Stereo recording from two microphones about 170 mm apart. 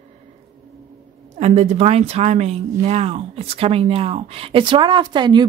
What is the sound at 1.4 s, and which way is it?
Speech, 40° right (ahead or behind).